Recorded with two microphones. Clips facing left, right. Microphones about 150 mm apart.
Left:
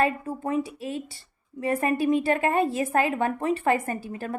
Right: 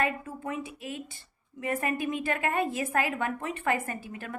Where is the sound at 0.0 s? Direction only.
35° left (ahead or behind).